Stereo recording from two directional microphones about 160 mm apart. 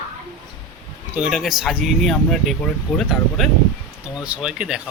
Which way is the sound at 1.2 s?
Centre (ahead or behind).